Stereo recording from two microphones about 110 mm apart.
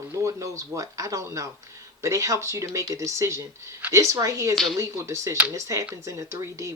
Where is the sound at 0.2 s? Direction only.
30° right (ahead or behind).